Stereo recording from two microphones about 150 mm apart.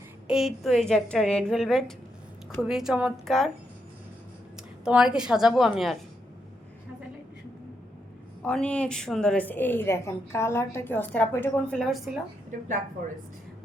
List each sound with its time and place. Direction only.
0.3 s a woman's voice: centre (ahead or behind)
4.9 s a woman's voice: 5° right (ahead or behind)
8.4 s a woman's voice: 10° left (ahead or behind)
12.5 s a woman's voice: 60° right (ahead or behind)